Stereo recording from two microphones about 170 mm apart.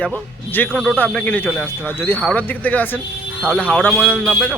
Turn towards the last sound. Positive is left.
turn(degrees=10)  # may be behind; listen again after turning